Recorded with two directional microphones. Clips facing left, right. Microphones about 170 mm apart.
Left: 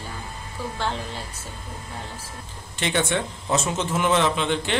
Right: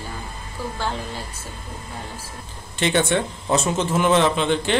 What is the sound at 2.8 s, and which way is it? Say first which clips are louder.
Speech: right 4 dB; 30° right (ahead or behind).